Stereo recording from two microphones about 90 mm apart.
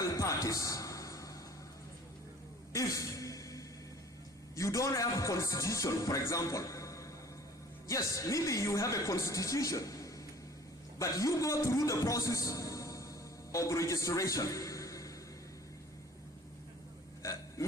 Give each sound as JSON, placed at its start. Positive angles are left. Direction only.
{"t": 0.0, "sound": "music", "side_deg": 35}
{"t": 2.7, "sound": "a sound", "side_deg": 35}
{"t": 4.5, "sound": "a man's voice", "side_deg": 35}